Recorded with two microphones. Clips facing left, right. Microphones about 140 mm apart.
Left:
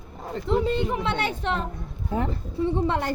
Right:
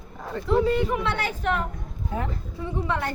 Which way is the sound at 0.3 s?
25° left (ahead or behind).